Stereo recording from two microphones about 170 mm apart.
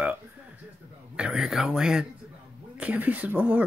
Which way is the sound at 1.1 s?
5° right (ahead or behind).